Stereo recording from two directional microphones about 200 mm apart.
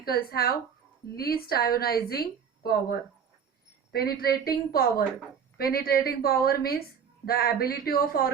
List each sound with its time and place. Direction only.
0.0 s a woman's voice: 50° left (ahead or behind)